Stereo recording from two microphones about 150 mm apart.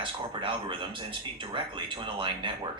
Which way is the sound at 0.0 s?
35° right (ahead or behind).